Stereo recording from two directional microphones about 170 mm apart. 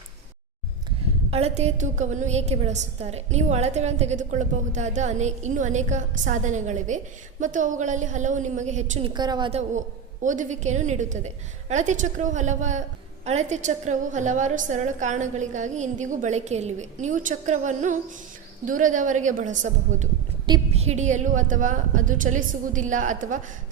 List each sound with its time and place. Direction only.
1.3 s a woman's voice: 40° right (ahead or behind)
9.5 s a man's voice: 40° right (ahead or behind)